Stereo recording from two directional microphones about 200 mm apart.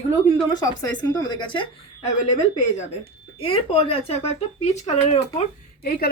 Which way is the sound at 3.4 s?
25° left (ahead or behind).